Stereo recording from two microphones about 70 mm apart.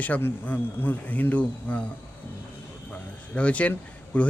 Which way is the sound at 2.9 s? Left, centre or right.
Centre.